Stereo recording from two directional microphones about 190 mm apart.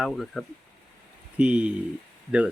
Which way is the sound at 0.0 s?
Centre (ahead or behind).